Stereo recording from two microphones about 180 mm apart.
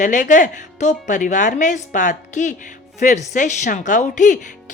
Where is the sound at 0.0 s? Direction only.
45° left (ahead or behind).